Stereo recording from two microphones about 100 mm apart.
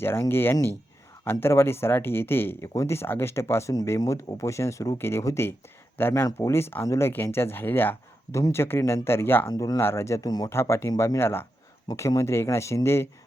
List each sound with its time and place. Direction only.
0.0 s speech: 25° left (ahead or behind); by 10.5 s 40° left (ahead or behind)
10.5 s speech: 25° left (ahead or behind)